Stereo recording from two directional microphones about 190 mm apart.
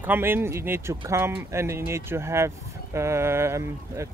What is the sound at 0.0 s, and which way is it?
Speech, 10° right (ahead or behind).